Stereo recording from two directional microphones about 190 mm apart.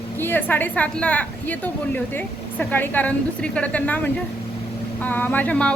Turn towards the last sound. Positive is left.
turn(degrees=5)  # may be behind; listen again after turning